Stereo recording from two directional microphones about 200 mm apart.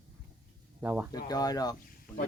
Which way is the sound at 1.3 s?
20° left (ahead or behind).